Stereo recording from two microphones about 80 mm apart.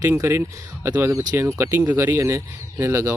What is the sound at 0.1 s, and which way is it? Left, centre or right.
Speech, right.